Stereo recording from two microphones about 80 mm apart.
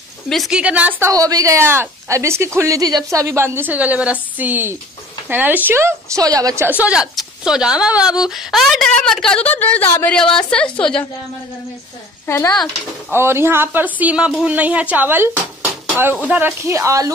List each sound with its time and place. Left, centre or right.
0.5 s a woman's voice: centre
1.1 s speech: right
6.2 s speech: right
6.8 s a woman's voice: centre
9.4 s a woman's voice: centre
10.0 s a woman's voice: centre
12.3 s speech: left
13.1 s speech: right
13.7 s speech: right
16.6 s speech: right